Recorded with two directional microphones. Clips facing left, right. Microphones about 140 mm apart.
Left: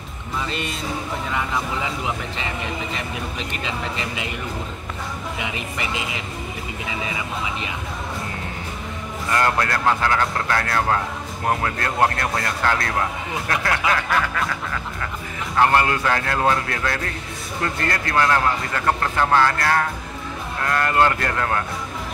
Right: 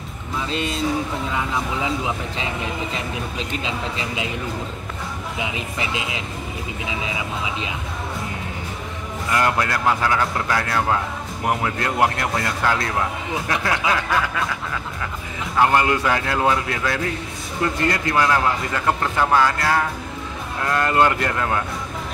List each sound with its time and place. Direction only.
9.3 s a man's voice: 15° right (ahead or behind)
15.5 s a man's voice: 15° right (ahead or behind)